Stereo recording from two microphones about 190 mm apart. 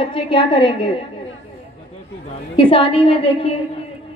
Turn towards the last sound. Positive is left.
turn(degrees=30)  # may be behind; listen again after turning